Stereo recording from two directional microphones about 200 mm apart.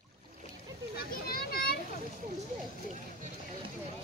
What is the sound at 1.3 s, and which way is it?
Children playing, 50° left (ahead or behind).